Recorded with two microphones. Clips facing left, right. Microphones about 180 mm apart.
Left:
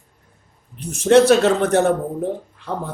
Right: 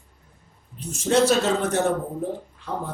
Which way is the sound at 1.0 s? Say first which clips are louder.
Left 7 dB; 65° left (ahead or behind).